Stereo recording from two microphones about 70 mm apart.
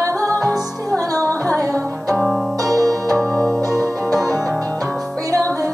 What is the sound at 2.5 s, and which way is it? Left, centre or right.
Music, right.